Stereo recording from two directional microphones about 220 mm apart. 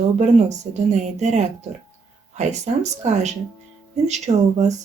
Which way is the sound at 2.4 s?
30° right (ahead or behind).